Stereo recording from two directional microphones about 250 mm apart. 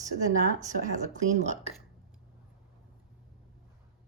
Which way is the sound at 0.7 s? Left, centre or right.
Right.